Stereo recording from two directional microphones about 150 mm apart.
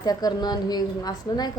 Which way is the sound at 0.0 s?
25° left (ahead or behind).